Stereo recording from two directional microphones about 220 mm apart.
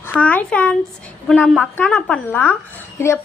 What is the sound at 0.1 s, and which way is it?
A woman's voice, 5° left (ahead or behind).